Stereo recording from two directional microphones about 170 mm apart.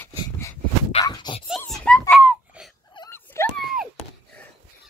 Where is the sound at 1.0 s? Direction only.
25° left (ahead or behind).